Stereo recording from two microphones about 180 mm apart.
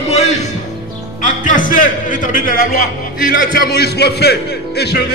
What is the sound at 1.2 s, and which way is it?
A man's voice, 45° left (ahead or behind).